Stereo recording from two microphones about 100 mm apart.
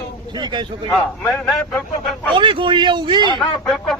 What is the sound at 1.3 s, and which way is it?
Speech, 5° left (ahead or behind).